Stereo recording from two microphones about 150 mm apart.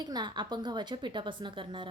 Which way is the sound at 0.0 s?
30° right (ahead or behind).